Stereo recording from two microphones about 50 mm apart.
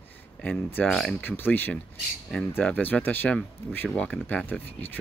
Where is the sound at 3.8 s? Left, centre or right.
Centre.